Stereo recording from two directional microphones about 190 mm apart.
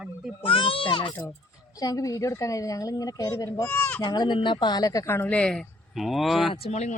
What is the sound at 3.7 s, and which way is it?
Speech, 10° left (ahead or behind).